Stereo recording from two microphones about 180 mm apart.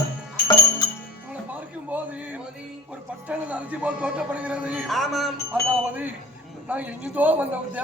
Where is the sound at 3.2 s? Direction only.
5° right (ahead or behind).